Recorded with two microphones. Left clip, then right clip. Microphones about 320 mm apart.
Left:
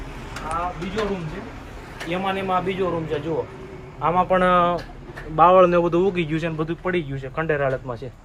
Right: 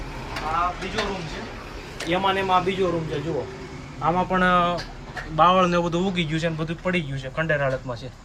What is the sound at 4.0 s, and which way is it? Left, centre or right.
A man's voice, left.